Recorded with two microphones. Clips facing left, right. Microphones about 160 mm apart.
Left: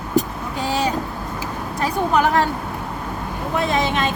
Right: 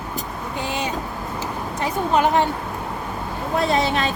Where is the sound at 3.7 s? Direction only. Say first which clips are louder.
Even; 35° right (ahead or behind).